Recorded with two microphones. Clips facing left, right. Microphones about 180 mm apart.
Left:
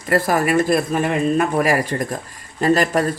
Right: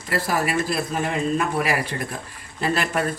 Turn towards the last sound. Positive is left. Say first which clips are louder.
# left 7 dB
turn(degrees=40)  # may be behind; listen again after turning